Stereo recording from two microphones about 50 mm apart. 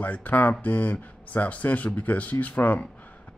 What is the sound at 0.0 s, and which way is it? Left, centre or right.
Speech, left.